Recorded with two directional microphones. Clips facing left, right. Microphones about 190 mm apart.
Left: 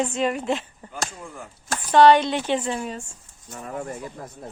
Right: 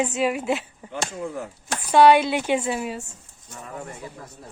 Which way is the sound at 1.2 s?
70° right (ahead or behind).